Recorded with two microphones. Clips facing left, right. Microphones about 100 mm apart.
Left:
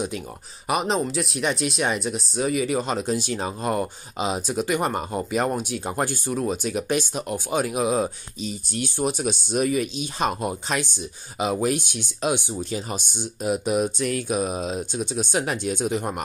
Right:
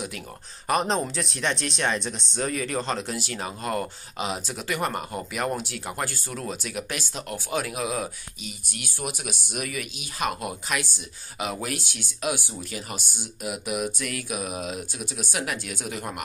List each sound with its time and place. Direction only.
0.7 s speech: 5° left (ahead or behind); by 16.2 s 25° left (ahead or behind)